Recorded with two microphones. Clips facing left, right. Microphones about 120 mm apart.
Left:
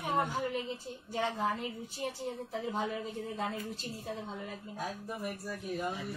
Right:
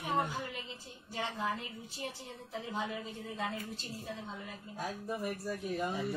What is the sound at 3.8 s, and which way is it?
Speech, 40° left (ahead or behind).